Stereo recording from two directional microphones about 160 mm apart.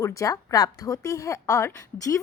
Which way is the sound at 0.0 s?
20° left (ahead or behind).